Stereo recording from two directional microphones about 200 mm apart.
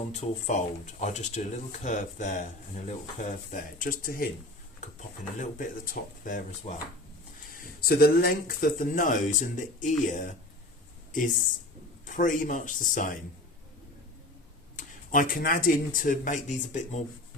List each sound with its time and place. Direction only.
0.1 s speech: 35° left (ahead or behind)
5.4 s speech: 40° left (ahead or behind)
7.8 s speech: 50° left (ahead or behind)
12.0 s speech: 40° left (ahead or behind)
14.8 s speech: 40° left (ahead or behind)